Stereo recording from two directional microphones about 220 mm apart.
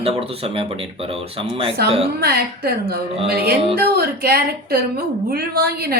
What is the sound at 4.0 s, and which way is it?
Speech, 45° right (ahead or behind).